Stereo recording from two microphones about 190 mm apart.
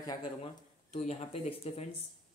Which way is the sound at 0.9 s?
35° left (ahead or behind).